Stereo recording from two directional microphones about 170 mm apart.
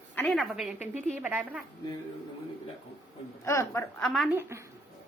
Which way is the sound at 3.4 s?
15° left (ahead or behind).